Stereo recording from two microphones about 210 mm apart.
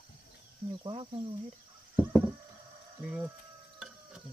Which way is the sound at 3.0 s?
5° right (ahead or behind).